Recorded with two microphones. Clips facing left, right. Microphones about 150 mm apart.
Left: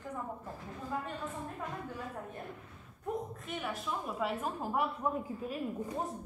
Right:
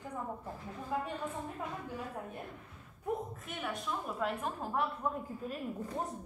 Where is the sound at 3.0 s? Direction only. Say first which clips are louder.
Right 1 dB; centre (ahead or behind).